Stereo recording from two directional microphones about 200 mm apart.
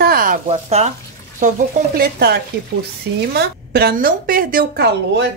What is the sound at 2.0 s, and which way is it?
A woman's voice, 50° right (ahead or behind).